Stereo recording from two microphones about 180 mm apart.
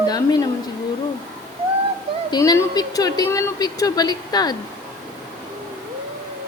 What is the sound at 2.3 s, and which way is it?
A woman's voice, 20° left (ahead or behind).